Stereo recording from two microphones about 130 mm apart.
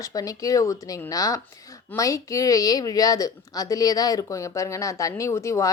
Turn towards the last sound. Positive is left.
turn(degrees=25)  # may be behind; listen again after turning